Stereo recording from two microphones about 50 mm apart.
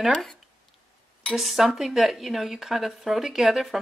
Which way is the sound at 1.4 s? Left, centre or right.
Centre.